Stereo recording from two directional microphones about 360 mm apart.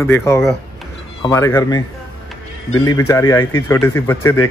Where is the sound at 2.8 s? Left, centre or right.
Centre.